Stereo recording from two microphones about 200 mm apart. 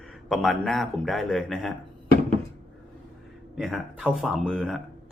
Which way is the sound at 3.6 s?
Centre (ahead or behind).